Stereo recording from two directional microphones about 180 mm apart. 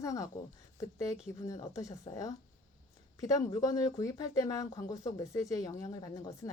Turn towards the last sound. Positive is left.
turn(degrees=20)  # may be behind; listen again after turning